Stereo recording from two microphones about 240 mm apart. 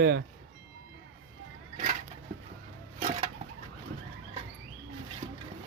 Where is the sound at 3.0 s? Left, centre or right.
Right.